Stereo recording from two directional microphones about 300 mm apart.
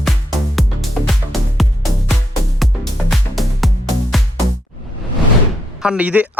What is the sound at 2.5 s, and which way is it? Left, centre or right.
Music, centre.